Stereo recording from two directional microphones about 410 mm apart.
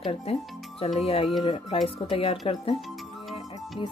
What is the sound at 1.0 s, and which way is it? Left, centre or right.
Speech, centre.